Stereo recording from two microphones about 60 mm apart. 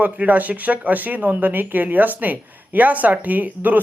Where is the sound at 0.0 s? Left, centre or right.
Right.